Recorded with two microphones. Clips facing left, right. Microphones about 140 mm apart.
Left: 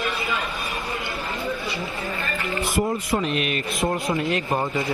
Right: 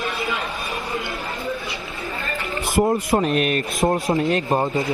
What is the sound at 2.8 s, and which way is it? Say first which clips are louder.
Speech: right 6 dB; 45° right (ahead or behind).